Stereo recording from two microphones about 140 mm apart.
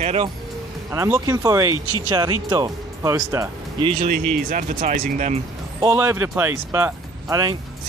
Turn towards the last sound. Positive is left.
turn(degrees=-25)  # may be behind; listen again after turning